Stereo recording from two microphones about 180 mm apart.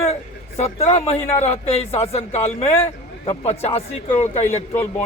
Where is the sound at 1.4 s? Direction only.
35° left (ahead or behind).